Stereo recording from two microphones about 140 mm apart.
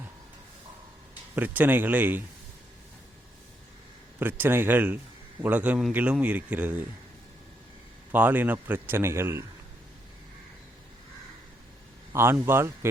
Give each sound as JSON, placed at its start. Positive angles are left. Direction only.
{"t": 1.4, "sound": "speech", "side_deg": -15}
{"t": 4.2, "sound": "speech", "side_deg": -15}
{"t": 8.1, "sound": "speech", "side_deg": -15}
{"t": 12.1, "sound": "speech", "side_deg": -15}